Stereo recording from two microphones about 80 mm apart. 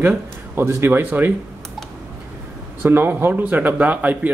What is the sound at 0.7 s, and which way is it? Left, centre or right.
Speech, right.